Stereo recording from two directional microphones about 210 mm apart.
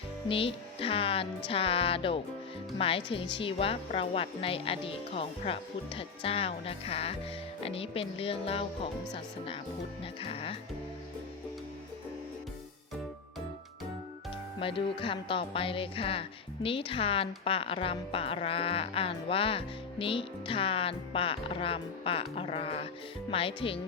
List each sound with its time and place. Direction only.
0.3 s a woman's voice: 25° left (ahead or behind)
14.6 s a woman's voice: 25° left (ahead or behind)